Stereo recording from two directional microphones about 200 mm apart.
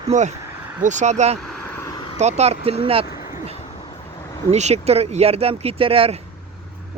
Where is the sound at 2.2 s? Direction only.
35° right (ahead or behind).